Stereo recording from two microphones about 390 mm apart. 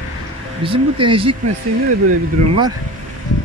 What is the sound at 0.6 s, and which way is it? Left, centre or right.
Speech, centre.